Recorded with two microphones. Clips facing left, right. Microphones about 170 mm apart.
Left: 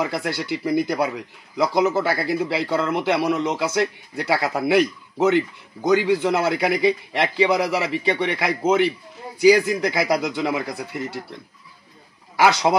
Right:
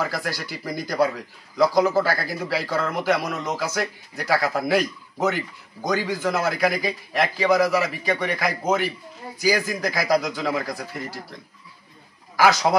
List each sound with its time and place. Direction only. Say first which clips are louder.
0.0 s a man's voice: left 3 dB; 25° left (ahead or behind)
12.4 s a man's voice: left 1 dB; 25° left (ahead or behind)